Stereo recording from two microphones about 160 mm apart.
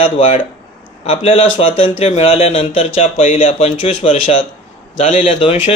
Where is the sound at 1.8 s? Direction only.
35° left (ahead or behind).